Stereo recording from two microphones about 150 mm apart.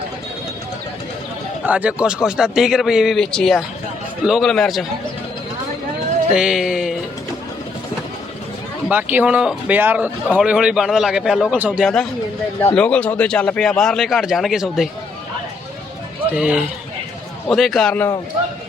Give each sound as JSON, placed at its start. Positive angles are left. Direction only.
{"t": 1.6, "sound": "speech", "side_deg": -10}
{"t": 6.3, "sound": "speech", "side_deg": -5}
{"t": 8.9, "sound": "speech", "side_deg": -10}
{"t": 16.3, "sound": "speech", "side_deg": -5}